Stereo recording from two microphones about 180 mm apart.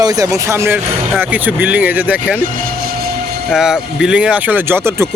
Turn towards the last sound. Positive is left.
turn(degrees=-15)  # may be behind; listen again after turning